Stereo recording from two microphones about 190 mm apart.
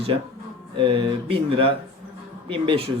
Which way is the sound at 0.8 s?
30° right (ahead or behind).